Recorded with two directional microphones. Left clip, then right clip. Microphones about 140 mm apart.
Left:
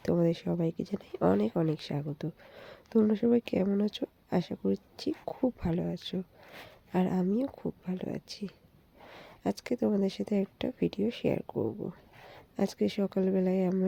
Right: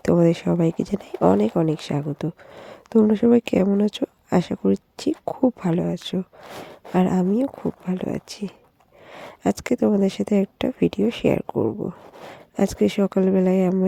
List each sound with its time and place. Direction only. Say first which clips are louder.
0.0 s speech: right 10 dB; 55° right (ahead or behind)